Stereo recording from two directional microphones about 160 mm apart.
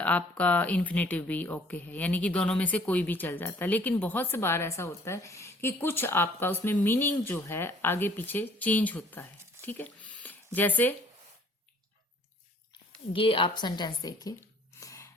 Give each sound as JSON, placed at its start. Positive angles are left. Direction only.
{"t": 0.0, "sound": "speech", "side_deg": 10}
{"t": 13.1, "sound": "speech", "side_deg": 35}
{"t": 14.8, "sound": "a sound", "side_deg": 20}